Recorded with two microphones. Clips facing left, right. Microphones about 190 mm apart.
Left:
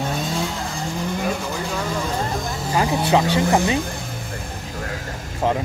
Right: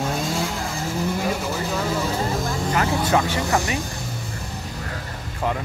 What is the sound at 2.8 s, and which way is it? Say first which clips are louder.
Speech: left 4 dB; 15° left (ahead or behind).